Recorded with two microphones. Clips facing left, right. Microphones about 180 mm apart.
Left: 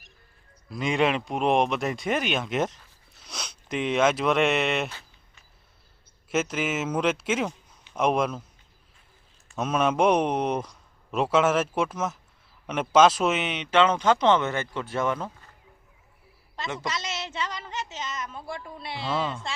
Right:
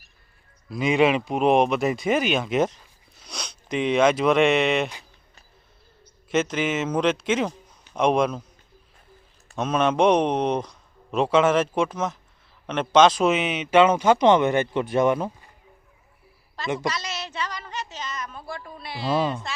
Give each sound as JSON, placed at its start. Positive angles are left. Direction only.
{"t": 0.7, "sound": "speech", "side_deg": 0}
{"t": 6.3, "sound": "speech", "side_deg": 5}
{"t": 9.6, "sound": "a man's voice", "side_deg": 5}
{"t": 16.8, "sound": "a sound", "side_deg": 25}